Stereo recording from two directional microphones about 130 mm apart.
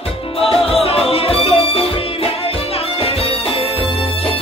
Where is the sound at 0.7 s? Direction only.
50° left (ahead or behind).